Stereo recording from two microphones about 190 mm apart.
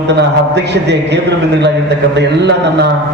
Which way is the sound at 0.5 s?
65° right (ahead or behind).